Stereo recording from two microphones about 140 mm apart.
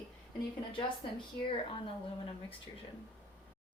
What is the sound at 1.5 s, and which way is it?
Speech, 40° left (ahead or behind).